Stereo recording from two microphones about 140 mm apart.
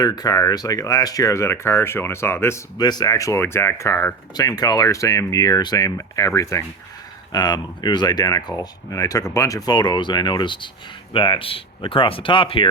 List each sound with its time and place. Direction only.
0.0 s speech: 25° left (ahead or behind)
2.7 s speech: 30° left (ahead or behind)